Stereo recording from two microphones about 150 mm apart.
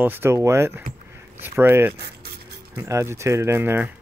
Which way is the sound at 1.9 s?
90° right.